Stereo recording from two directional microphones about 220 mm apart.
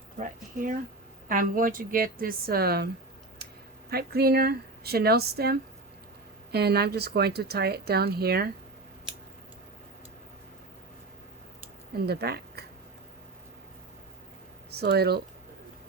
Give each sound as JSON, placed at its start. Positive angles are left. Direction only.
{"t": 0.2, "sound": "a sound", "side_deg": -35}
{"t": 1.3, "sound": "a woman's voice", "side_deg": -40}
{"t": 12.0, "sound": "speech", "side_deg": -45}
{"t": 14.7, "sound": "speech", "side_deg": -45}